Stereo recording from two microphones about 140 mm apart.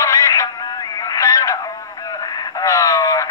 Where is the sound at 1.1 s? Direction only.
25° left (ahead or behind).